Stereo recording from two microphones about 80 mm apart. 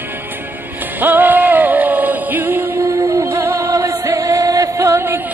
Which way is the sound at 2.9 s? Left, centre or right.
Right.